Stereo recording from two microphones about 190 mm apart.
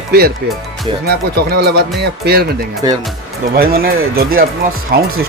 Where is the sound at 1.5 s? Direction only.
55° right (ahead or behind).